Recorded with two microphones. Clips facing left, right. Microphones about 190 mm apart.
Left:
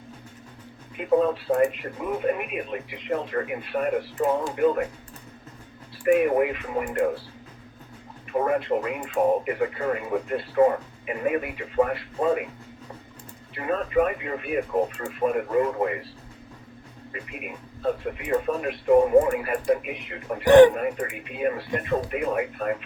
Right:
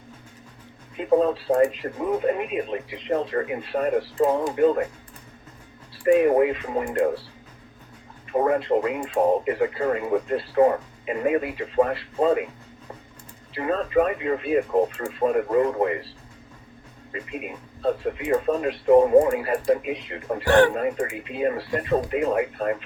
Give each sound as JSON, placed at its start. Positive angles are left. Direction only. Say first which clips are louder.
{"t": 0.9, "sound": "speech", "louder": "right 1 dB", "side_deg": -30}
{"t": 6.1, "sound": "speech", "louder": "right 3 dB", "side_deg": -30}
{"t": 8.3, "sound": "speech", "louder": "right 3 dB", "side_deg": -30}
{"t": 13.5, "sound": "speech", "louder": "right 2 dB", "side_deg": -30}
{"t": 20.4, "sound": "speech", "louder": "left 5 dB", "side_deg": 20}
{"t": 20.7, "sound": "speech", "louder": "right 3 dB", "side_deg": -25}